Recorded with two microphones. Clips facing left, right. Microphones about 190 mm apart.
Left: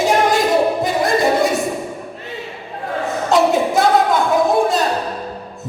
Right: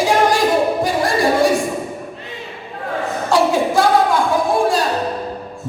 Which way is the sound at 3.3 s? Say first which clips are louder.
Left 1 dB; 20° left (ahead or behind).